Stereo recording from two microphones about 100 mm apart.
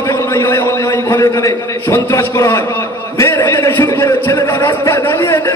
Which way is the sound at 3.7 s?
25° left (ahead or behind).